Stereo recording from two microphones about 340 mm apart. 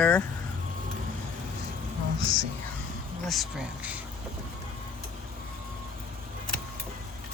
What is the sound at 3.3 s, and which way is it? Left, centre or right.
Speech, centre.